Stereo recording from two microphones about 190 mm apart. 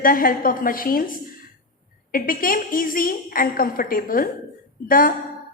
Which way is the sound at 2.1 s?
50° left (ahead or behind).